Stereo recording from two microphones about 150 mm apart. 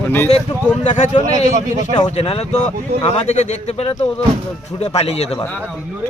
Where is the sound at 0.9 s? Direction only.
50° left (ahead or behind).